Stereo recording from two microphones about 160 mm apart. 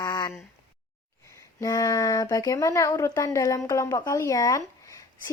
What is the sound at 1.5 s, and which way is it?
Speech, 20° left (ahead or behind).